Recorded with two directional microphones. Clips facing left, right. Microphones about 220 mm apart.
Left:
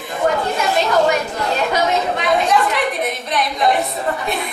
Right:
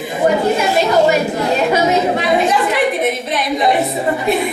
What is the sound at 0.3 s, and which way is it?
A woman's voice, 5° right (ahead or behind).